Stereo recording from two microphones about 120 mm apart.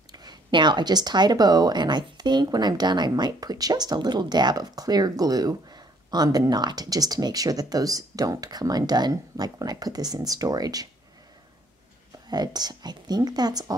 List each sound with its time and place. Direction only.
0.1 s a woman's voice: 35° right (ahead or behind)
12.3 s a woman's voice: 35° right (ahead or behind)